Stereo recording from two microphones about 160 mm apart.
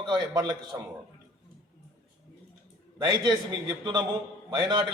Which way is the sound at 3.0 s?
25° right (ahead or behind).